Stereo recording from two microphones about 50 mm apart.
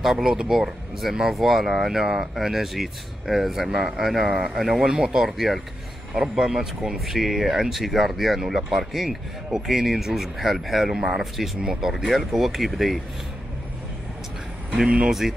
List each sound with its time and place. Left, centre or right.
0.0 s speech: centre
11.0 s speech: centre
15.0 s speech: centre